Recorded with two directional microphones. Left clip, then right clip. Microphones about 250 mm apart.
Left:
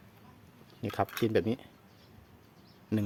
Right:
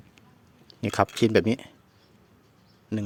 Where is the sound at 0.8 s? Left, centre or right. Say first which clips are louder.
Right 8 dB; right.